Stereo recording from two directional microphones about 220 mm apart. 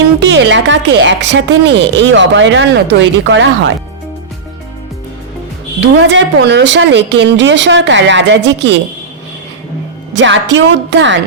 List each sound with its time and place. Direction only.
0.2 s a woman's voice: 50° right (ahead or behind)
5.8 s speech: 55° right (ahead or behind)
10.2 s speech: 55° right (ahead or behind)